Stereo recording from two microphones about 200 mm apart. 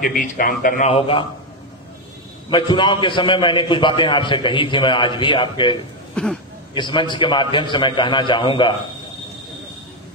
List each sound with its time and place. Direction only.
0.0 s speech: 45° left (ahead or behind)
0.8 s a man's voice: 30° left (ahead or behind)
2.5 s a man's voice: 25° left (ahead or behind)
6.2 s speech: 5° left (ahead or behind)
6.7 s a man's voice: 25° left (ahead or behind)